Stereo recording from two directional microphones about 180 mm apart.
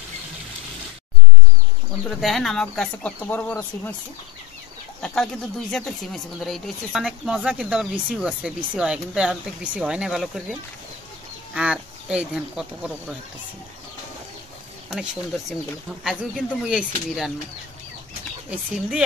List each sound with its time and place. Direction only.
2.0 s speech: centre (ahead or behind)
5.0 s speech: 5° left (ahead or behind)
14.9 s speech: centre (ahead or behind)
18.5 s speech: 5° right (ahead or behind)